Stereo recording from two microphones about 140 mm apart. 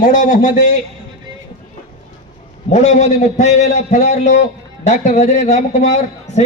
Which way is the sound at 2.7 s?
55° left (ahead or behind).